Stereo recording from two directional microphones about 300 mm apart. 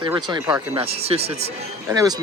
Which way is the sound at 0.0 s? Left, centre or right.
Centre.